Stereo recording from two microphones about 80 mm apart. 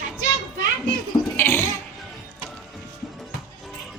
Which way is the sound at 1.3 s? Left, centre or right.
Left.